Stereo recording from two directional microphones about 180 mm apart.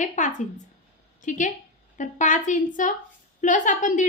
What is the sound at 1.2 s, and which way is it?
A woman's voice, 45° left (ahead or behind).